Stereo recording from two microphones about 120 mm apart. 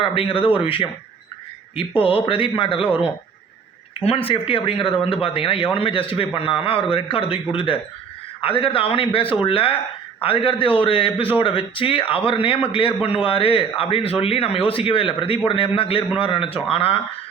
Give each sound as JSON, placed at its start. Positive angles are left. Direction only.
{"t": 0.0, "sound": "speech", "side_deg": 50}